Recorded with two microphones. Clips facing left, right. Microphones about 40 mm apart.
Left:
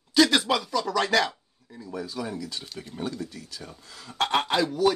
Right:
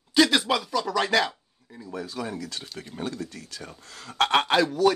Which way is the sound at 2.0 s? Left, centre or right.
Right.